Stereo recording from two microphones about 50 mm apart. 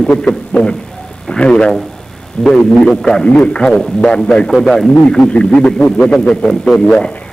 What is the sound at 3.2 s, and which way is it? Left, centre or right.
A man's voice, left.